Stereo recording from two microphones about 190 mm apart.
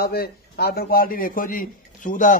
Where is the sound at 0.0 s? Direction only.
55° left (ahead or behind).